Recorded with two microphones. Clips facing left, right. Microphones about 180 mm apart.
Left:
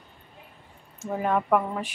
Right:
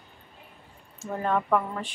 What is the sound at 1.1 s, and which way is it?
Speech, 10° left (ahead or behind).